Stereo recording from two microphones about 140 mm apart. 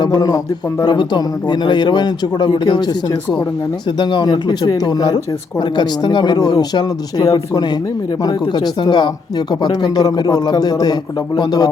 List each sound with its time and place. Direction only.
0.0 s a man's voice: 30° left (ahead or behind)